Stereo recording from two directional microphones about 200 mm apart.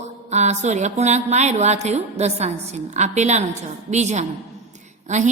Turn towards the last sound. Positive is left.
turn(degrees=-35)  # may be behind; listen again after turning